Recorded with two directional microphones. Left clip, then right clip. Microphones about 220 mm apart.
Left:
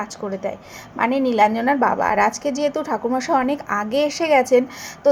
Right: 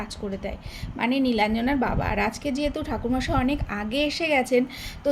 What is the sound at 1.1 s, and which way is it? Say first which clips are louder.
Speech: left 2 dB; 30° left (ahead or behind).